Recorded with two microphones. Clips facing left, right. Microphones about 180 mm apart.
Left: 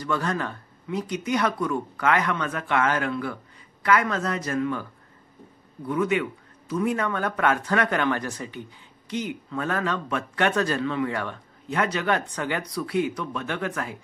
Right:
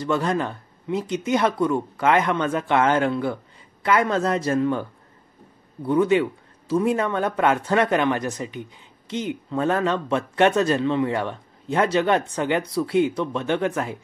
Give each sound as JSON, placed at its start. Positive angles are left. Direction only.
{"t": 0.0, "sound": "speech", "side_deg": -20}
{"t": 5.9, "sound": "speech", "side_deg": -30}